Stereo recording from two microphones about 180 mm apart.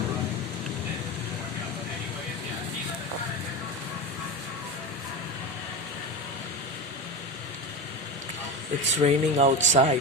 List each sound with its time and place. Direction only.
9.0 s speech: 40° right (ahead or behind)